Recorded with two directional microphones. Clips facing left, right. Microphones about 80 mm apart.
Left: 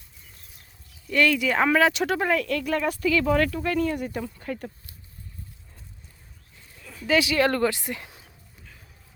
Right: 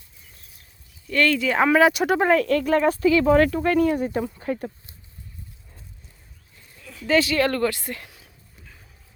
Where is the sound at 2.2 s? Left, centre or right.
Right.